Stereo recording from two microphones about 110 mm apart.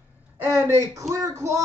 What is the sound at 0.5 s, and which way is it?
Speech, 30° right (ahead or behind).